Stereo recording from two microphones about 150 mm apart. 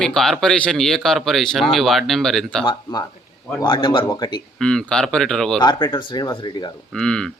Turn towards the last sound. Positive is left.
turn(degrees=5)  # may be behind; listen again after turning